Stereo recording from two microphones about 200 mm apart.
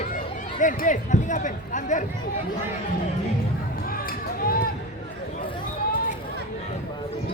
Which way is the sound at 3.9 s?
45° left (ahead or behind).